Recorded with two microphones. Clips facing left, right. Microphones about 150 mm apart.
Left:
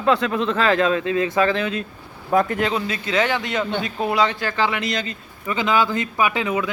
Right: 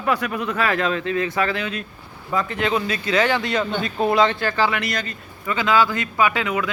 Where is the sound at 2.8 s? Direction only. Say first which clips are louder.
Right 1 dB; 25° left (ahead or behind).